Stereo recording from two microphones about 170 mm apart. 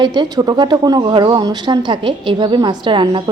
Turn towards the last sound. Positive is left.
turn(degrees=-30)  # may be behind; listen again after turning